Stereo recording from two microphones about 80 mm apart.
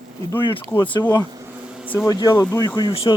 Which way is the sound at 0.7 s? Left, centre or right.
Left.